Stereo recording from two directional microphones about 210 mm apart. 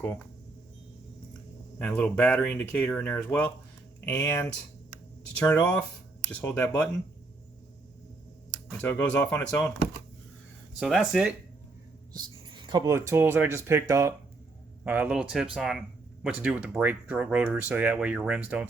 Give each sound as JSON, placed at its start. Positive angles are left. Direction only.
{"t": 1.8, "sound": "speech", "side_deg": 5}
{"t": 5.5, "sound": "speech", "side_deg": 5}
{"t": 8.7, "sound": "speech", "side_deg": 10}
{"t": 10.8, "sound": "speech", "side_deg": 0}
{"t": 12.1, "sound": "speech", "side_deg": -20}